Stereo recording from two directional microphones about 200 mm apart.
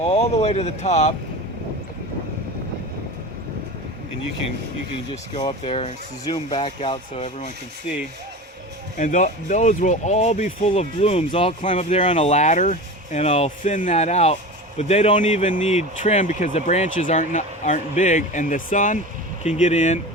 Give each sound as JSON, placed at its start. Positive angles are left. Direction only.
{"t": 0.0, "sound": "speech", "side_deg": 30}
{"t": 5.1, "sound": "speech", "side_deg": 25}
{"t": 9.0, "sound": "speech", "side_deg": 40}